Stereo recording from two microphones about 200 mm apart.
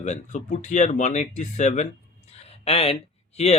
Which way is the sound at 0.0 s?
35° left (ahead or behind).